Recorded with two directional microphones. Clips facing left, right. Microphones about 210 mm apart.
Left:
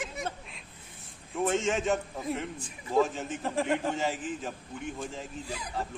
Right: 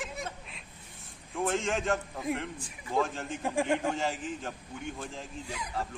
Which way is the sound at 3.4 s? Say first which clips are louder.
Right 1 dB; 15° right (ahead or behind).